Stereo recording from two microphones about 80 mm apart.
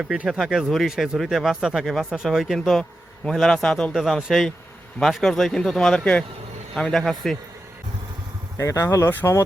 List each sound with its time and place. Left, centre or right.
0.0 s speech: centre
8.5 s speech: left